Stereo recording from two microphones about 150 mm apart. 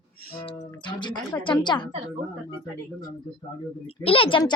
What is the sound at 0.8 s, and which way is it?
A woman's voice, 30° left (ahead or behind).